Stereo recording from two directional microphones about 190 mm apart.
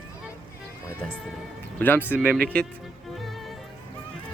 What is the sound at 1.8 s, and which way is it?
Speech, 10° left (ahead or behind).